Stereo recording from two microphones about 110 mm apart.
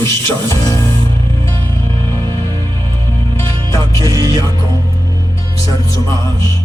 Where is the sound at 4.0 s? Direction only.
35° right (ahead or behind).